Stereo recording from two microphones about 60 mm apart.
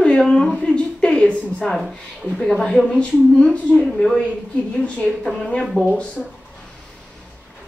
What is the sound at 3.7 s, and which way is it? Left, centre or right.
Speech, centre.